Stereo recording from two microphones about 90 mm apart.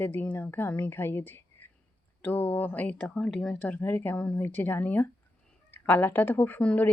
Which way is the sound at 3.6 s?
20° left (ahead or behind).